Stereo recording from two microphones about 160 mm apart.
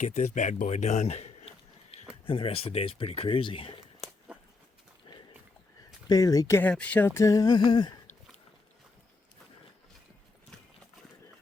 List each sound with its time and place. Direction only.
0.0 s a man's voice: 45° left (ahead or behind)
5.1 s horse: 30° left (ahead or behind)
6.1 s speech: 20° left (ahead or behind)
6.6 s speech: 10° left (ahead or behind); by 7.9 s 25° left (ahead or behind)